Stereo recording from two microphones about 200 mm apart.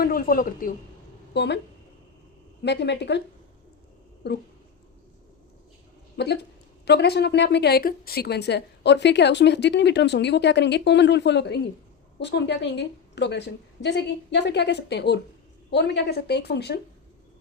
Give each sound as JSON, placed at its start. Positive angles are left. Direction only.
{"t": 0.0, "sound": "a woman's voice", "side_deg": 45}
{"t": 1.3, "sound": "speech", "side_deg": 60}
{"t": 2.6, "sound": "a woman's voice", "side_deg": 60}
{"t": 4.2, "sound": "a woman's voice", "side_deg": 55}
{"t": 6.1, "sound": "a woman's voice", "side_deg": 55}